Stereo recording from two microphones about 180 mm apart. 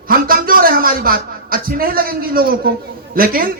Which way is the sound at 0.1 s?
55° right (ahead or behind).